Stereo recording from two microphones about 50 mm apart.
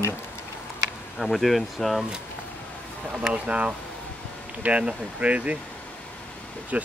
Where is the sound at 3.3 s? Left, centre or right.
Right.